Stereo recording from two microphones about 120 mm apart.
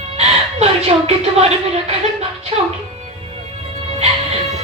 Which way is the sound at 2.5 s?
55° right (ahead or behind).